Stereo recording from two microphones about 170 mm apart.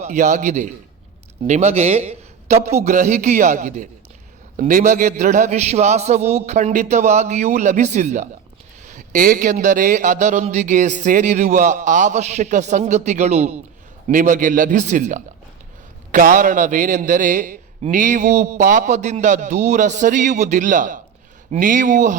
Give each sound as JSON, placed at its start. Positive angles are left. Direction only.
{"t": 0.0, "sound": "a man's voice", "side_deg": -45}
{"t": 14.1, "sound": "a man's voice", "side_deg": -50}